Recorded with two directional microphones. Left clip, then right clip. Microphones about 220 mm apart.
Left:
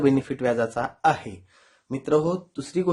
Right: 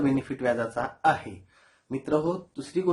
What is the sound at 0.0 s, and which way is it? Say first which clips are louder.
Speech: left 4 dB; 50° left (ahead or behind).